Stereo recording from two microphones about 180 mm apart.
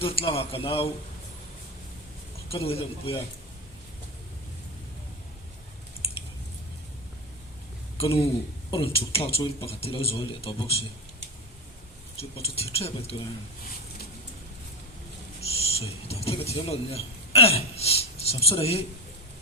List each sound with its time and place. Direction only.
0.0 s speech: 30° left (ahead or behind)
2.5 s speech: 30° left (ahead or behind)
7.9 s speech: 30° left (ahead or behind)
12.4 s speech: 35° left (ahead or behind)
15.4 s speech: 35° left (ahead or behind)